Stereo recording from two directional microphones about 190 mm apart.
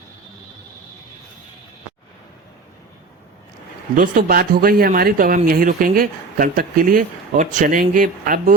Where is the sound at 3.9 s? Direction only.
50° right (ahead or behind).